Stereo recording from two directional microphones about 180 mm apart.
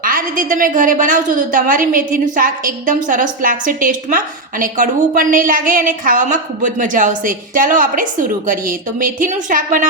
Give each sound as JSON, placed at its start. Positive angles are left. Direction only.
{"t": 0.0, "sound": "a woman's voice", "side_deg": -50}